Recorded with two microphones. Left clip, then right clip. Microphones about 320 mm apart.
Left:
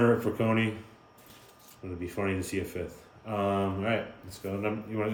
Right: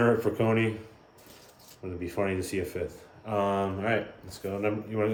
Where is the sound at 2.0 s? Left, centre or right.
Centre.